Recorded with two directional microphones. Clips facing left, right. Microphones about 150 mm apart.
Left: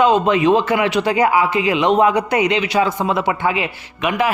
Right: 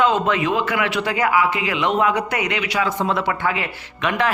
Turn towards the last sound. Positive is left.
turn(degrees=10)  # may be behind; listen again after turning